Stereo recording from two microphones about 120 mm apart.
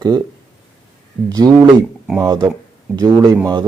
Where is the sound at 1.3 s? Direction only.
35° right (ahead or behind).